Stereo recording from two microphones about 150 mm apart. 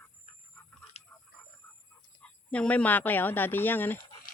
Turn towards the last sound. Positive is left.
turn(degrees=15)  # may be behind; listen again after turning